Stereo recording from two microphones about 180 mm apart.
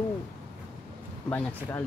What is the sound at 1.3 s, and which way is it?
Speech, 10° left (ahead or behind).